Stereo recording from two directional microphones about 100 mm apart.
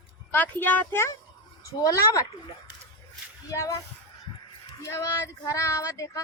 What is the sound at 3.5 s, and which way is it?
Speech, 30° left (ahead or behind).